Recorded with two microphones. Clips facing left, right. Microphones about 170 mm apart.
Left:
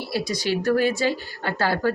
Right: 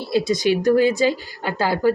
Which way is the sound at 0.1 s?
20° right (ahead or behind).